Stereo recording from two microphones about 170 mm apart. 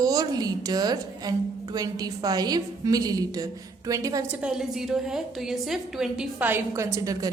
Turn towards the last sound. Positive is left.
turn(degrees=-20)  # may be behind; listen again after turning